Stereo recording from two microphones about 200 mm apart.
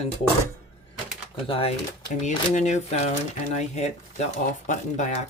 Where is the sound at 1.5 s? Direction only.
30° left (ahead or behind).